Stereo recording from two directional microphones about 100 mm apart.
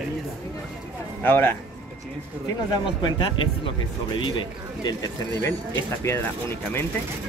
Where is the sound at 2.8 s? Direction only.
55° left (ahead or behind).